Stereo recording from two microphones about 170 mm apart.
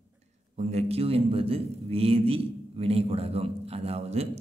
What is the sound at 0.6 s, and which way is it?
A man's voice, 40° right (ahead or behind).